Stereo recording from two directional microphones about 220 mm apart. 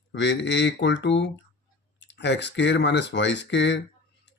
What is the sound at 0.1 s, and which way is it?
Speech, 50° left (ahead or behind).